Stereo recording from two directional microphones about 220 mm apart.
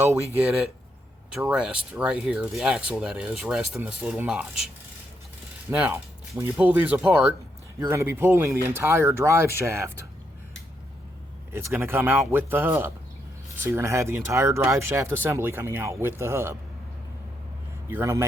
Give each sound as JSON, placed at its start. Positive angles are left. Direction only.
{"t": 0.0, "sound": "speech", "side_deg": -10}
{"t": 5.7, "sound": "speech", "side_deg": -10}
{"t": 11.5, "sound": "speech", "side_deg": -10}
{"t": 17.8, "sound": "speech", "side_deg": -10}